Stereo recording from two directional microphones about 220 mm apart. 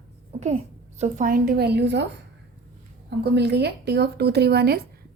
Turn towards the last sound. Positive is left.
turn(degrees=-45)  # may be behind; listen again after turning